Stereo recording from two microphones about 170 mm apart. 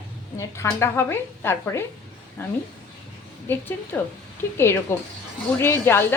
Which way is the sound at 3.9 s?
15° left (ahead or behind).